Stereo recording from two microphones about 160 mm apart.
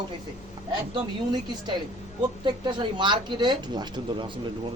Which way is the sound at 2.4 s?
30° right (ahead or behind).